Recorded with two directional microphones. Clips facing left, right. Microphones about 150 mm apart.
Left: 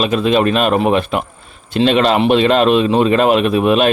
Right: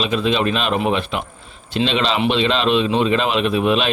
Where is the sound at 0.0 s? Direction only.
50° left (ahead or behind).